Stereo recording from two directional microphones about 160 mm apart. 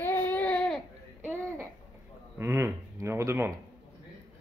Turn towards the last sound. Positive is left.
turn(degrees=-15)  # may be behind; listen again after turning